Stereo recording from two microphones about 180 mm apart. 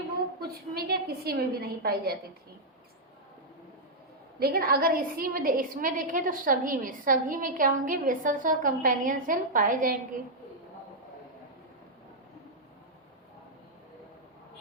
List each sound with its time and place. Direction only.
0.4 s a woman's voice: 60° right (ahead or behind)
4.4 s a woman's voice: 55° right (ahead or behind)